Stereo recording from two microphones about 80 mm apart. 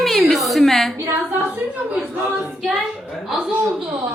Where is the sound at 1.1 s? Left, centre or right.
Right.